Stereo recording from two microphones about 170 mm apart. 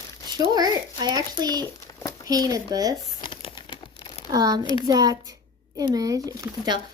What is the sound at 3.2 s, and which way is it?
Crumpling, 30° left (ahead or behind).